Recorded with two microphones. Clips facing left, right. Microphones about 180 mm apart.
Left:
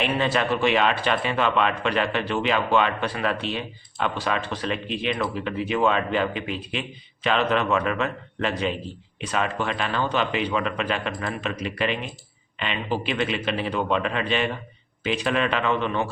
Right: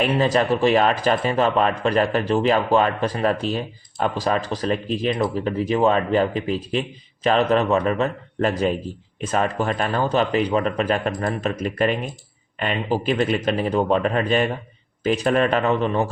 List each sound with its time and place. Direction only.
0.0 s speech: 35° right (ahead or behind)